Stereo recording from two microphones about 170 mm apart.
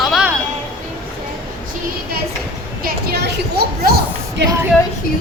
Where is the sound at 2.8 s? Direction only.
70° right (ahead or behind).